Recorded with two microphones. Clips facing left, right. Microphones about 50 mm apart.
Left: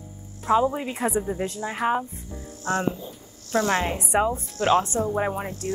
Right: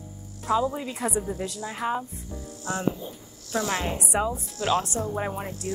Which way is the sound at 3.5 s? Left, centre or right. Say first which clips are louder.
Left 4 dB; left.